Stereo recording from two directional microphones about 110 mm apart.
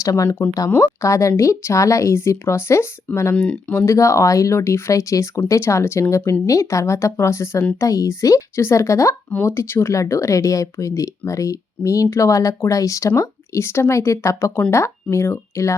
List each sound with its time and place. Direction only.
0.0 s speech: 30° left (ahead or behind)
3.3 s speech: 10° left (ahead or behind)